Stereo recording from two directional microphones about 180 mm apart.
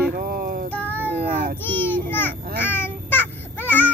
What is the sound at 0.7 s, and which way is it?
Child singing, 10° left (ahead or behind).